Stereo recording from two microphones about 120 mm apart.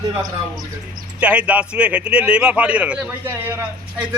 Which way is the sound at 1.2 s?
10° right (ahead or behind).